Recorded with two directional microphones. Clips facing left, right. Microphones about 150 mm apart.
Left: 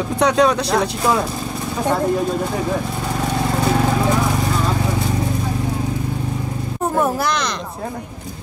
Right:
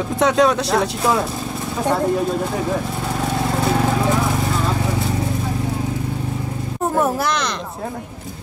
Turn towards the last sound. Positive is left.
turn(degrees=0)  # may be behind; listen again after turning